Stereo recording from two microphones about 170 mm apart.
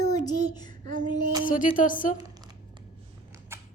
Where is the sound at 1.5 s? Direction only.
50° left (ahead or behind).